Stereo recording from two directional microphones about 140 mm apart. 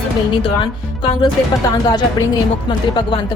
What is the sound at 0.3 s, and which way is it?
Music, 40° left (ahead or behind).